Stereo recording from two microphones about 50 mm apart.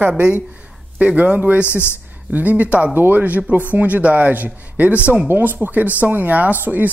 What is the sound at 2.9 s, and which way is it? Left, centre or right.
Speech, right.